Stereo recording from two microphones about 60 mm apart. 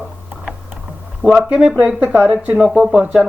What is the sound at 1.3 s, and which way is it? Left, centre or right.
Speech, centre.